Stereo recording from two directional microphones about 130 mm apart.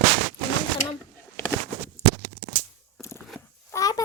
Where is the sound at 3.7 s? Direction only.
30° left (ahead or behind).